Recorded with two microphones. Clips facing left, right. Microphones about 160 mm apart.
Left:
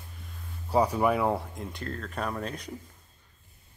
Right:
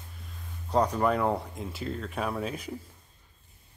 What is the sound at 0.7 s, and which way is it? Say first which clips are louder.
Speech: left 1 dB; 10° left (ahead or behind).